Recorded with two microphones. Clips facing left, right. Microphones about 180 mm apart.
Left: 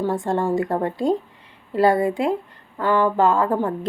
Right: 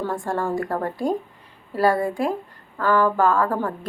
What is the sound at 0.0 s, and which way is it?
A woman's voice, 20° left (ahead or behind).